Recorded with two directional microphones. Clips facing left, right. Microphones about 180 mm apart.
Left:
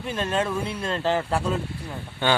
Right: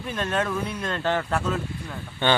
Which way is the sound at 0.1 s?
30° left (ahead or behind).